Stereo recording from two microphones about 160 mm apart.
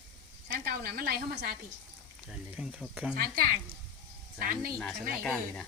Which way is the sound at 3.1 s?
70° right (ahead or behind).